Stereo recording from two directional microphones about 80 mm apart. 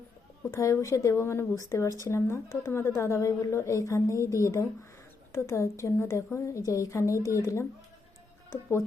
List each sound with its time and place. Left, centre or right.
0.5 s a woman's voice: left